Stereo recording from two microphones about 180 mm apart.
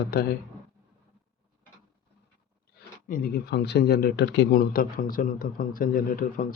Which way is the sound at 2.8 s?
60° left (ahead or behind).